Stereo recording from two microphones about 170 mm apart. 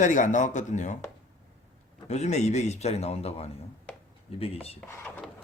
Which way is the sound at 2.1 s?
40° left (ahead or behind).